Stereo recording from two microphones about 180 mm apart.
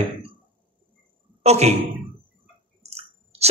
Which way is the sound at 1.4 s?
35° right (ahead or behind).